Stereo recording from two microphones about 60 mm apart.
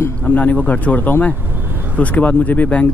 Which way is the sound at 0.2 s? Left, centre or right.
Left.